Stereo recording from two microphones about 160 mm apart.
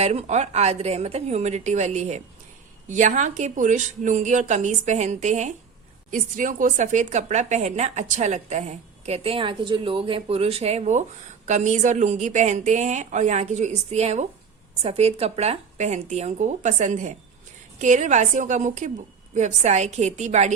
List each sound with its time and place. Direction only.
0.0 s a woman's voice: 45° right (ahead or behind)